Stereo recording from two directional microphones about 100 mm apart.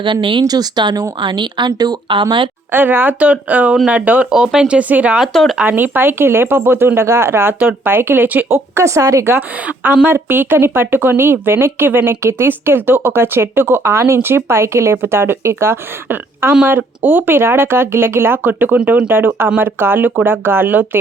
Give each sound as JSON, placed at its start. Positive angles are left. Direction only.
{"t": 0.0, "sound": "speech", "side_deg": -55}
{"t": 2.7, "sound": "speech", "side_deg": -20}
{"t": 5.2, "sound": "speech", "side_deg": 0}
{"t": 5.6, "sound": "speech", "side_deg": -20}
{"t": 9.6, "sound": "speech", "side_deg": -15}